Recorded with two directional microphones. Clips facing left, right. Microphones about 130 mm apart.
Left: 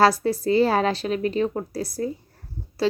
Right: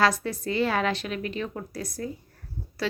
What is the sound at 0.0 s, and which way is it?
Speech, 35° left (ahead or behind).